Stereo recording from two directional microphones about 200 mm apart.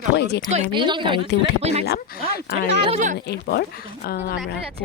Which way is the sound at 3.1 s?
55° left (ahead or behind).